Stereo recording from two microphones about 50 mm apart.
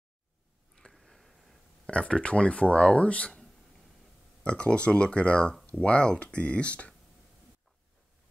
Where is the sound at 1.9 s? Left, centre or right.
Left.